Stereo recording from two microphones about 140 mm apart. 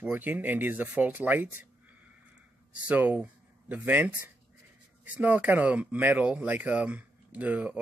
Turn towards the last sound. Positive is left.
turn(degrees=-10)  # may be behind; listen again after turning